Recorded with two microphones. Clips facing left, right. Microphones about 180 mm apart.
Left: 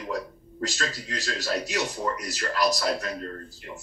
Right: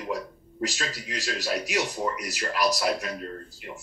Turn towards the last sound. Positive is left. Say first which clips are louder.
# even
turn(degrees=-15)  # may be behind; listen again after turning